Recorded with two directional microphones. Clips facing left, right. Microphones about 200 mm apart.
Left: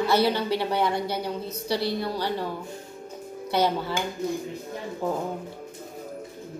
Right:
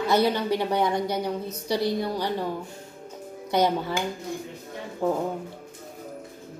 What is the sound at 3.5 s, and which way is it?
Speech, 15° right (ahead or behind).